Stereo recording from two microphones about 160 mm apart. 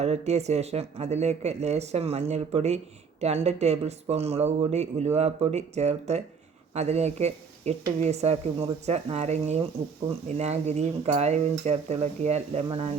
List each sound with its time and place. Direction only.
0.0 s speech: 45° right (ahead or behind)